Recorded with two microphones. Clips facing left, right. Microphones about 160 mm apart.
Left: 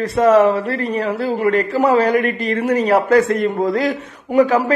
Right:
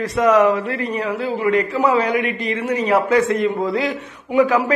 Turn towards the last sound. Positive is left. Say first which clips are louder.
# left 2 dB
turn(degrees=35)  # may be behind; listen again after turning